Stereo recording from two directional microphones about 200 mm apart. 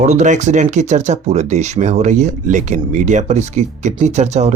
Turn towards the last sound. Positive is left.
turn(degrees=-35)  # may be behind; listen again after turning